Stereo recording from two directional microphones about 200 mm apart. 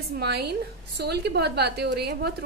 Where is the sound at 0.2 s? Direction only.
55° right (ahead or behind).